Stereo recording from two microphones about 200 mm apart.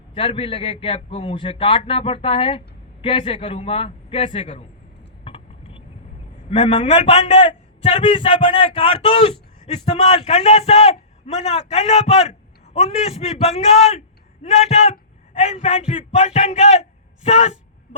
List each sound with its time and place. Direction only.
0.1 s a man's voice: 25° left (ahead or behind)
5.2 s a sound: 30° left (ahead or behind)
6.5 s a man's voice: 30° left (ahead or behind)